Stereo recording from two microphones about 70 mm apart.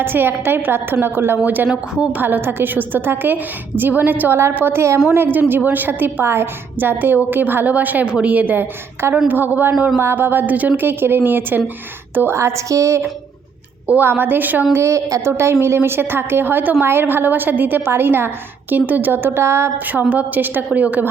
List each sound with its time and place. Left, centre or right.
0.0 s a woman's voice: right
1.5 s a woman's voice: right
2.2 s a woman's voice: right
13.8 s a woman's voice: right
14.8 s a woman's voice: right
19.9 s a woman's voice: right